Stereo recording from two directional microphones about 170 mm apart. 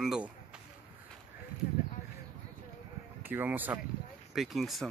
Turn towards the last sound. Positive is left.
turn(degrees=0)  # may be behind; listen again after turning